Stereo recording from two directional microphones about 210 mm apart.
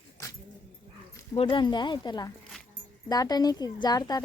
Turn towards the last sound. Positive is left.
turn(degrees=20)  # may be behind; listen again after turning